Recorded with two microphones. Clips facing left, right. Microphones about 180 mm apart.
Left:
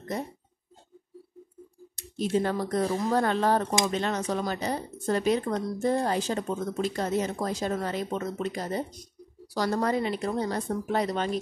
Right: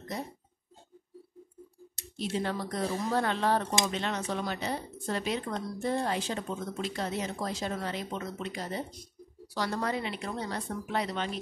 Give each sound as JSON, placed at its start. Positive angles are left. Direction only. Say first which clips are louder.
{"t": 2.1, "sound": "speech", "louder": "left 6 dB", "side_deg": 45}